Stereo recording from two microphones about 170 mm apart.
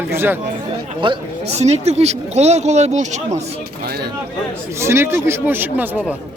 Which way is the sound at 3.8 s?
70° right (ahead or behind).